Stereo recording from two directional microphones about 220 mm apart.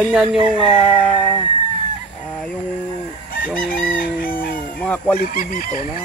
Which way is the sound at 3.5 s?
40° left (ahead or behind).